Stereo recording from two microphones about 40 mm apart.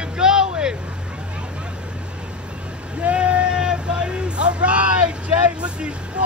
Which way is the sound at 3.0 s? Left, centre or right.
Right.